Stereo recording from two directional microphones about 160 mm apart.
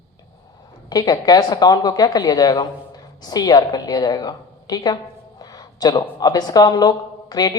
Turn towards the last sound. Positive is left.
turn(degrees=25)  # may be behind; listen again after turning